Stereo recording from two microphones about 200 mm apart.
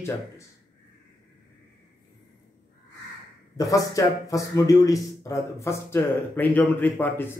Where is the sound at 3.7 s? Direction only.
15° left (ahead or behind).